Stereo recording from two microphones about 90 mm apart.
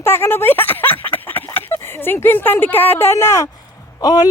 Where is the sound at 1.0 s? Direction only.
20° left (ahead or behind).